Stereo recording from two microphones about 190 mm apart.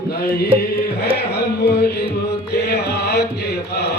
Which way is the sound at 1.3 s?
55° left (ahead or behind).